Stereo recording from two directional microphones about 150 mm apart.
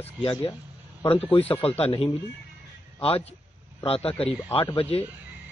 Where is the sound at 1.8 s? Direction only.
40° left (ahead or behind).